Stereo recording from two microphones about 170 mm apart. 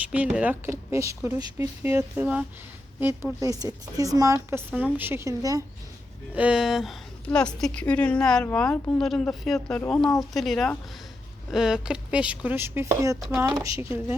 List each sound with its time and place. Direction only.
0.1 s speech: 10° right (ahead or behind)
3.4 s speech: 20° right (ahead or behind)
6.3 s a woman's voice: 5° right (ahead or behind)